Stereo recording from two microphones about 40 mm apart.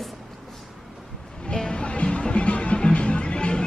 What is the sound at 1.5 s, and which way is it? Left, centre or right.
Music, left.